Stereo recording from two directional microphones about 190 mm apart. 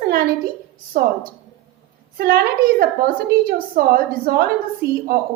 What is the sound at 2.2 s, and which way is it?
A woman's voice, 55° right (ahead or behind).